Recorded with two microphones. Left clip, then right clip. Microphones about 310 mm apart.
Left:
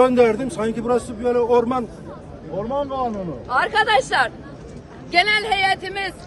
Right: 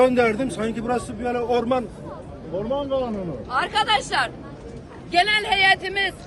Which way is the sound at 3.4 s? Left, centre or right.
Left.